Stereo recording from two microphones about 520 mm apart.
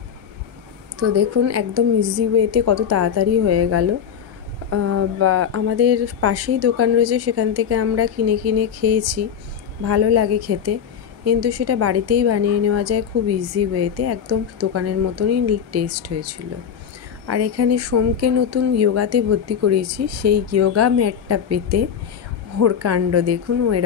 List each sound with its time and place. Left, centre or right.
0.9 s a woman's voice: right
17.3 s a woman's voice: right